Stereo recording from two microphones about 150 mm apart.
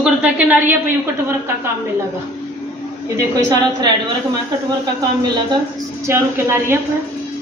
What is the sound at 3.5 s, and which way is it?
Speech, 25° right (ahead or behind).